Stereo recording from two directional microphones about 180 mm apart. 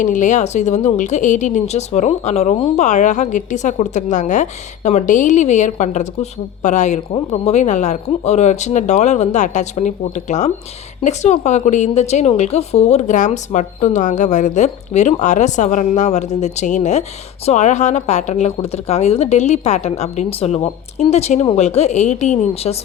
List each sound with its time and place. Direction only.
0.0 s a woman's voice: 45° left (ahead or behind)